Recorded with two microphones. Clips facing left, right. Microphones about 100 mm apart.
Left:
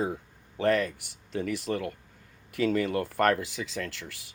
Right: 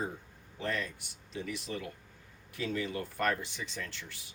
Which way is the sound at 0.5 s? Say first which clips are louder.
Left 11 dB; 70° left (ahead or behind).